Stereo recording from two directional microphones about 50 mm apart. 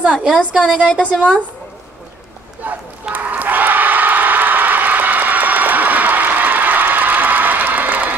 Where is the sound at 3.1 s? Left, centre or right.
Right.